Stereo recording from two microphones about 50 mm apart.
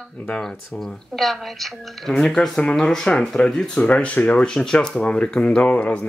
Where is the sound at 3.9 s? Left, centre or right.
Left.